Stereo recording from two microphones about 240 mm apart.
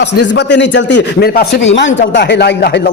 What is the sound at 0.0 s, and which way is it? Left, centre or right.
Speech, left.